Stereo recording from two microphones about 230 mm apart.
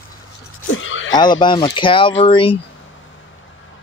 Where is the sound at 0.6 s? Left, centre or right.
Left.